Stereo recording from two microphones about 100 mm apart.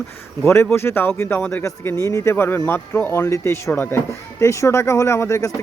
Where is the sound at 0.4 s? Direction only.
25° left (ahead or behind).